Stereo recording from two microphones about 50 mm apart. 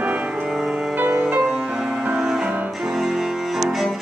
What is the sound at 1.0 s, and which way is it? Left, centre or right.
Music, right.